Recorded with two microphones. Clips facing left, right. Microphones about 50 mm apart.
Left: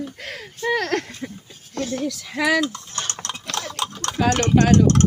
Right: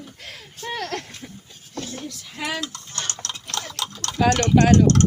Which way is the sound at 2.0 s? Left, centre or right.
Left.